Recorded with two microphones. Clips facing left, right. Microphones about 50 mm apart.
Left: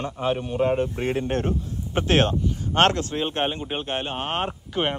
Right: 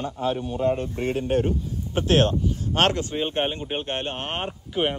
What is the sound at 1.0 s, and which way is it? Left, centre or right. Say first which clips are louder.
Speech: right 1 dB; left.